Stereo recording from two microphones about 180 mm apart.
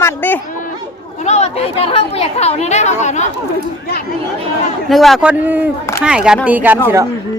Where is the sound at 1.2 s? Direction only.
35° left (ahead or behind).